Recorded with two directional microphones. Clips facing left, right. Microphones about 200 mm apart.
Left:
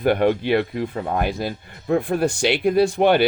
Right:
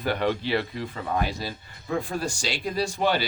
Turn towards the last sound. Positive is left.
turn(degrees=60)  # may be behind; listen again after turning